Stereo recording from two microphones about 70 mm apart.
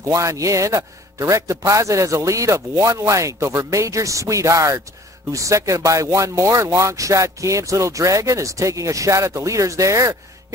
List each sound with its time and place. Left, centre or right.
0.1 s speech: right